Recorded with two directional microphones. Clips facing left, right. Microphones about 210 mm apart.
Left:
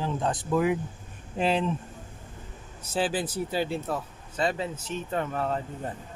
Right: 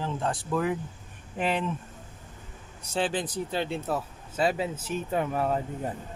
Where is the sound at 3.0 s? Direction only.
5° left (ahead or behind).